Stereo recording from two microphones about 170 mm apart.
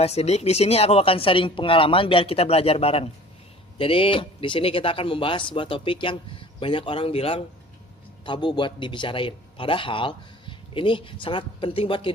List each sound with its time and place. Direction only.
0.0 s a man's voice: 40° left (ahead or behind)